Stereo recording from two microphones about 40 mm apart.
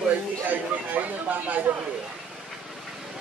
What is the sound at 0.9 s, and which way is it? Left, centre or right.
Speech, right.